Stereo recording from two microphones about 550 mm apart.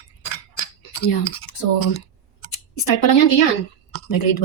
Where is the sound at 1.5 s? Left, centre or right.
Left.